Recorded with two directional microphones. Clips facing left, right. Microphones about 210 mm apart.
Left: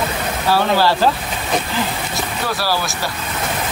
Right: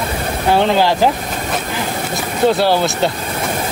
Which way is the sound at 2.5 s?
20° right (ahead or behind).